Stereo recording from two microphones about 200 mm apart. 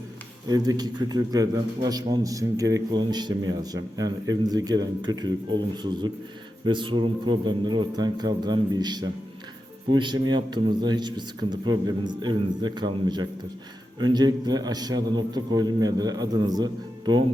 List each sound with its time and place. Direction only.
0.4 s a man's voice: 20° right (ahead or behind)